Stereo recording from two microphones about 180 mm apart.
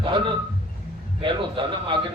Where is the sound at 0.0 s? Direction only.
25° right (ahead or behind).